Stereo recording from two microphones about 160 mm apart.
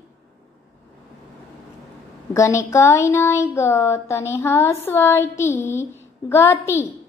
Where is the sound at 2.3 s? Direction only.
20° left (ahead or behind).